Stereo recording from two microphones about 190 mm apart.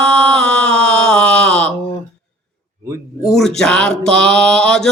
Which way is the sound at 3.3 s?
5° left (ahead or behind).